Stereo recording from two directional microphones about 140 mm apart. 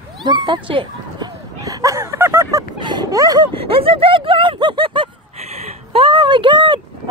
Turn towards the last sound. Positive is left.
turn(degrees=-35)  # may be behind; listen again after turning